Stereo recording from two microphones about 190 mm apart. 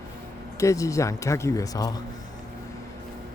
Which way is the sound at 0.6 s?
15° left (ahead or behind).